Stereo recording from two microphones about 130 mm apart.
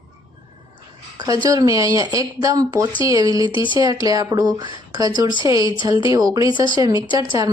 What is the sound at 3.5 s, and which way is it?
Speech, 40° left (ahead or behind).